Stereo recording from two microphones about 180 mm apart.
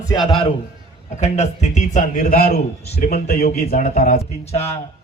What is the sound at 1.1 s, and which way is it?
A man's voice, 40° left (ahead or behind).